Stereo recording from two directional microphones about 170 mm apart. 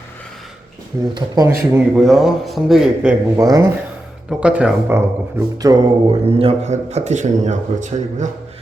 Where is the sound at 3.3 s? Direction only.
20° right (ahead or behind).